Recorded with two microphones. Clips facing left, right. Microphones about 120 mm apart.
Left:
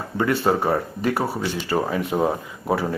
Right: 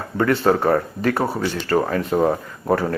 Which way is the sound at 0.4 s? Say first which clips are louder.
Right 3 dB; 10° left (ahead or behind).